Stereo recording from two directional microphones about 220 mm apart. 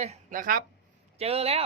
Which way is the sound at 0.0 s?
35° right (ahead or behind).